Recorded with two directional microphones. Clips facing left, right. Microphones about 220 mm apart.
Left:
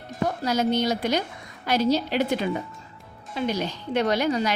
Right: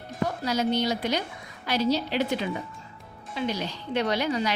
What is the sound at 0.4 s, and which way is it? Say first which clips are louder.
A woman's voice: left 2 dB; 45° left (ahead or behind).